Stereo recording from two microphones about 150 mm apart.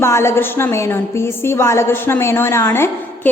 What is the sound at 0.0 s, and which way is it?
A woman's voice, 15° left (ahead or behind).